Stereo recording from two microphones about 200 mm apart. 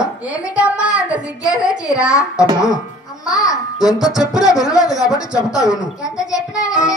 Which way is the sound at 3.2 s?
15° left (ahead or behind).